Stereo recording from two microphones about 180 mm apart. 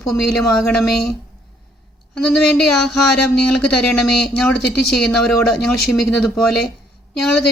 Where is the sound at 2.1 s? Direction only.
Centre (ahead or behind).